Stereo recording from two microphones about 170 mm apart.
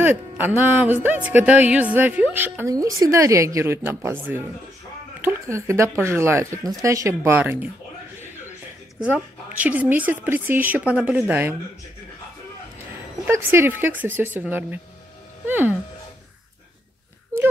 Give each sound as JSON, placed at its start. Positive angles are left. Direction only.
{"t": 0.0, "sound": "speech", "side_deg": -10}
{"t": 9.0, "sound": "speech", "side_deg": -10}
{"t": 13.2, "sound": "speech", "side_deg": -15}
{"t": 17.3, "sound": "a sound", "side_deg": -15}